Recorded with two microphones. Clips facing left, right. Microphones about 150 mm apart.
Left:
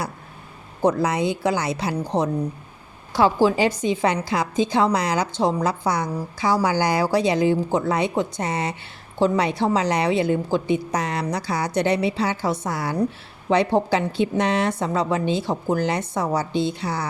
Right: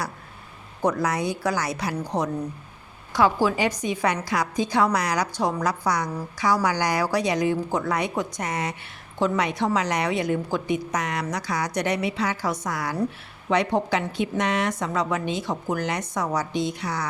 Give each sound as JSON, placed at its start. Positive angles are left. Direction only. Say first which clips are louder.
{"t": 0.8, "sound": "a woman's voice", "louder": "left 4 dB", "side_deg": 25}